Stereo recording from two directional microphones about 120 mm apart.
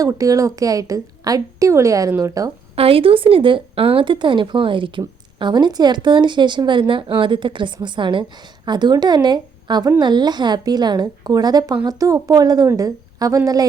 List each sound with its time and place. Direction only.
0.0 s a woman's voice: 30° right (ahead or behind)
2.7 s a woman's voice: 50° right (ahead or behind); by 13.7 s 30° right (ahead or behind)